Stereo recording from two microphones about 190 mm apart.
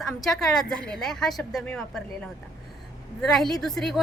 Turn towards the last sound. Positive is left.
turn(degrees=0)  # may be behind; listen again after turning